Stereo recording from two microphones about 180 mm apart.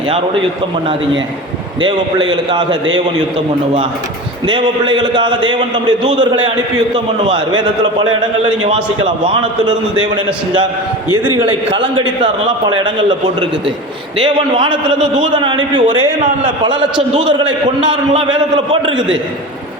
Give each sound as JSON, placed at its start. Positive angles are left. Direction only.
{"t": 1.8, "sound": "a man's voice", "side_deg": -25}
{"t": 4.4, "sound": "a man's voice", "side_deg": -25}
{"t": 9.6, "sound": "a man's voice", "side_deg": -25}